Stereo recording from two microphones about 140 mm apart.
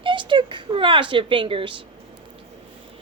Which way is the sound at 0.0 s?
35° right (ahead or behind).